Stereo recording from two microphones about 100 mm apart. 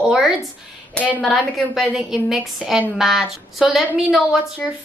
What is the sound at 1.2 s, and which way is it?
A woman's voice, 5° right (ahead or behind).